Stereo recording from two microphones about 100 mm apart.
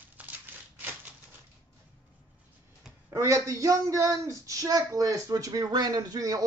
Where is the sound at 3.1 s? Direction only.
30° right (ahead or behind).